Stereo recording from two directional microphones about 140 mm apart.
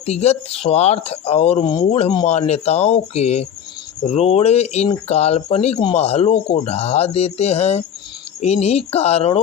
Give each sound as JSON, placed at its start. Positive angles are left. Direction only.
{"t": 0.0, "sound": "speech", "side_deg": 50}